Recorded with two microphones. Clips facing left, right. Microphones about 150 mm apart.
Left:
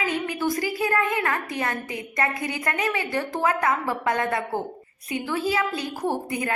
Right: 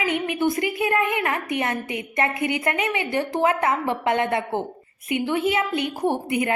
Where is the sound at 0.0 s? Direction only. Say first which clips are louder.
Right 3 dB; 20° right (ahead or behind).